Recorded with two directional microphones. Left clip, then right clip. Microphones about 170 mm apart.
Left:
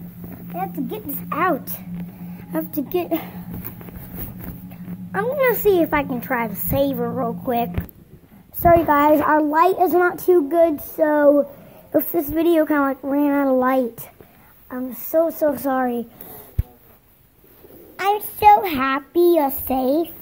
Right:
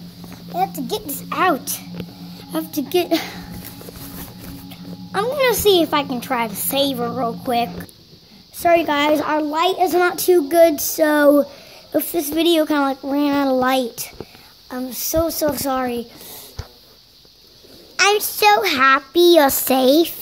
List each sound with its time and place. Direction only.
1.3 s speech: 5° right (ahead or behind)
3.1 s speech: 25° right (ahead or behind)
4.6 s speech: 10° right (ahead or behind)
8.7 s speech: 5° right (ahead or behind)
9.2 s a child's voice: 10° left (ahead or behind)
9.8 s speech: 5° right (ahead or behind)
11.0 s speech: 25° right (ahead or behind)
11.9 s speech: 5° right (ahead or behind)
14.7 s speech: 25° right (ahead or behind)
15.4 s speech: 5° right (ahead or behind)
17.9 s speech: 15° right (ahead or behind)